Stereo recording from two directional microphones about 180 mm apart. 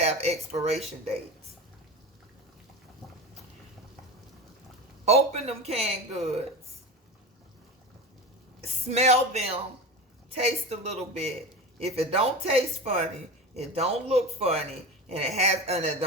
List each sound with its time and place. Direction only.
0.0 s a sound: 35° right (ahead or behind)
5.0 s speech: 35° right (ahead or behind)
8.6 s speech: 40° right (ahead or behind)